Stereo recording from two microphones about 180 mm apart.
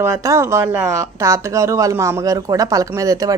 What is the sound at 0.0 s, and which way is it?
Speech, 15° right (ahead or behind).